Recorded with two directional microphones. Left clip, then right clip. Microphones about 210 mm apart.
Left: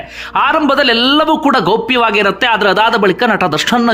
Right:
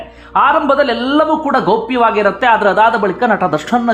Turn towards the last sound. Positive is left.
turn(degrees=15)  # may be behind; listen again after turning